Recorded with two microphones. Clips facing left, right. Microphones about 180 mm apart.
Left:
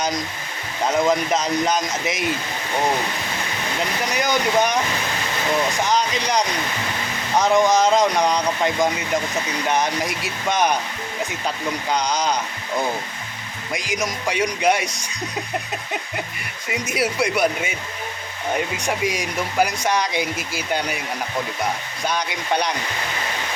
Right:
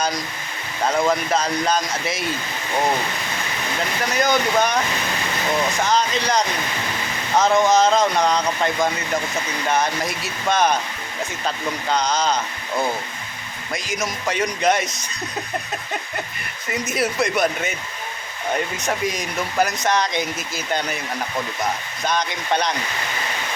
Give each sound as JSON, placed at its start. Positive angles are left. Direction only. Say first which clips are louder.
{"t": 1.0, "sound": "speech", "louder": "left 1 dB", "side_deg": 20}
{"t": 4.1, "sound": "speech", "louder": "right 1 dB", "side_deg": 15}
{"t": 5.8, "sound": "speech", "louder": "right 1 dB", "side_deg": 15}
{"t": 13.7, "sound": "speech", "louder": "left 1 dB", "side_deg": 15}
{"t": 16.6, "sound": "speech", "louder": "even", "side_deg": 10}
{"t": 18.8, "sound": "speech", "louder": "left 1 dB", "side_deg": 10}
{"t": 22.0, "sound": "speech", "louder": "right 1 dB", "side_deg": 10}